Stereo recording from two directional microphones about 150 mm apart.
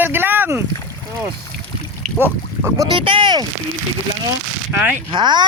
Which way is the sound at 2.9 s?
35° right (ahead or behind).